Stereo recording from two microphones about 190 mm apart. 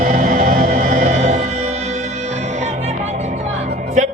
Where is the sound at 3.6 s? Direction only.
55° right (ahead or behind).